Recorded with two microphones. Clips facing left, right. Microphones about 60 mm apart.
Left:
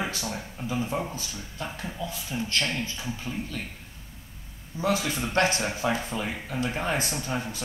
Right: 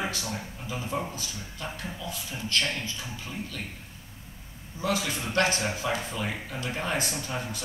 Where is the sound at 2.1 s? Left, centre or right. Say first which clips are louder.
Left 2 dB; left.